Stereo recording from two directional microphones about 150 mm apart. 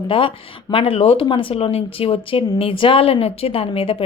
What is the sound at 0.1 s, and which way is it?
Speech, 35° left (ahead or behind).